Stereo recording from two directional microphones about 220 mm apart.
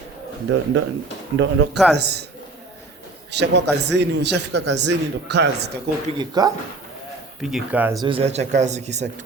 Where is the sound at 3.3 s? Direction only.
50° right (ahead or behind).